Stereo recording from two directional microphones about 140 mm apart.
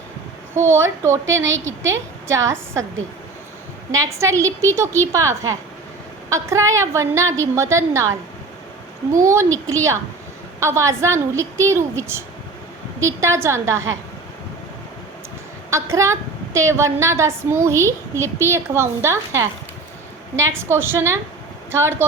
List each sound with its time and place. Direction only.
0.5 s a woman's voice: 20° right (ahead or behind)
3.9 s a woman's voice: 20° right (ahead or behind)
9.2 s a woman's voice: 20° right (ahead or behind)
15.7 s a woman's voice: 20° right (ahead or behind)